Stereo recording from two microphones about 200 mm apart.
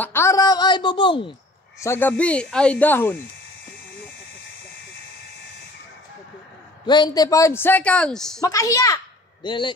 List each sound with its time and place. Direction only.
0.0 s a sound: 10° left (ahead or behind)
1.8 s a man's voice: 10° left (ahead or behind)
6.9 s a man's voice: 20° left (ahead or behind); by 8.4 s 5° left (ahead or behind)
8.4 s a woman's voice: 15° left (ahead or behind)